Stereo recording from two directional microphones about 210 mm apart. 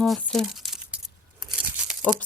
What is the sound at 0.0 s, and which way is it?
Speech, centre (ahead or behind).